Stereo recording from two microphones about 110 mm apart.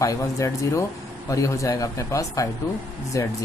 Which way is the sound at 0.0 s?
30° left (ahead or behind).